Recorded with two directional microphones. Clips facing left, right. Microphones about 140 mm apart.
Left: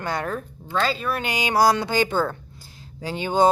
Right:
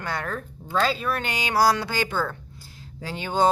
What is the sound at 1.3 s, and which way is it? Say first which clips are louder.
Speech: left 3 dB; 15° left (ahead or behind).